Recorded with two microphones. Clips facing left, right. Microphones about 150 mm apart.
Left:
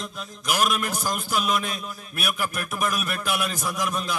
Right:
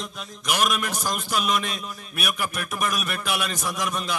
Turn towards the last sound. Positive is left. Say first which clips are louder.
# left 1 dB
turn(degrees=0)  # may be behind; listen again after turning